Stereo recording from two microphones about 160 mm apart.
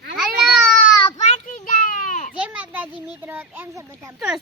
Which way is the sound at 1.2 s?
45° left (ahead or behind).